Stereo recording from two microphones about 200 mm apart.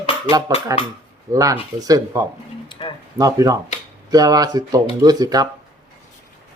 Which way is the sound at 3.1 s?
15° right (ahead or behind).